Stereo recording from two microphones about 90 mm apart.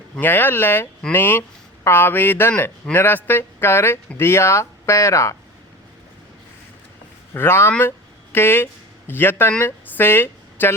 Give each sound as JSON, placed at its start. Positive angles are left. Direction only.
{"t": 0.2, "sound": "speech", "side_deg": 20}
{"t": 7.3, "sound": "speech", "side_deg": 25}